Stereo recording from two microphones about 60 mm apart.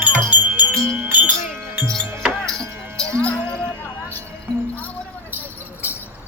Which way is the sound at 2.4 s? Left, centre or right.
Centre.